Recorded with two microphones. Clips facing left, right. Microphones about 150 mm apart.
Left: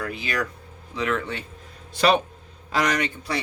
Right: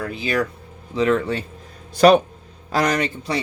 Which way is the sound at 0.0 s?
25° right (ahead or behind).